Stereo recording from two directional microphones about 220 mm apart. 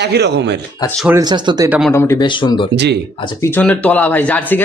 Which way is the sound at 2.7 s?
50° right (ahead or behind).